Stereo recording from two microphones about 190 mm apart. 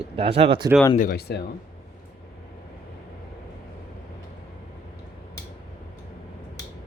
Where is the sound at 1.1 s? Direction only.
60° left (ahead or behind).